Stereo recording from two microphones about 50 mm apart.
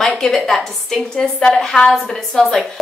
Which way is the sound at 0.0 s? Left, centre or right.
Centre.